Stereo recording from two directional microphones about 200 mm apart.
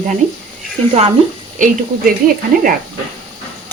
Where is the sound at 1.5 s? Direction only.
40° right (ahead or behind).